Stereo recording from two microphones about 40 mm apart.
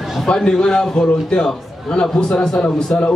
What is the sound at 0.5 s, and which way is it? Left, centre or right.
A man's voice, centre.